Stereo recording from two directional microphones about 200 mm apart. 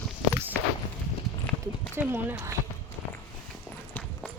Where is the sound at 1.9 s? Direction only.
10° right (ahead or behind).